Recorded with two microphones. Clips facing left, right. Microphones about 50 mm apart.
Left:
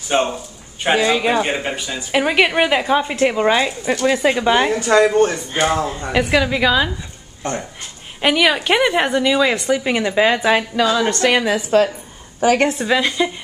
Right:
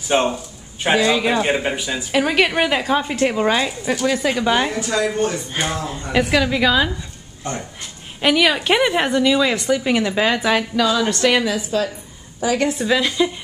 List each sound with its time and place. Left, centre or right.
0.1 s a woman's voice: centre
0.8 s a woman's voice: centre
1.5 s speech: centre
2.1 s a woman's voice: centre
4.0 s speech: left
4.4 s a woman's voice: centre
4.7 s speech: left
6.1 s a woman's voice: centre
8.2 s a woman's voice: centre; by 11.3 s left
11.4 s a woman's voice: left
12.8 s a woman's voice: centre